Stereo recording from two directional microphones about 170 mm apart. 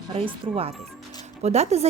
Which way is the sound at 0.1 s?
30° right (ahead or behind).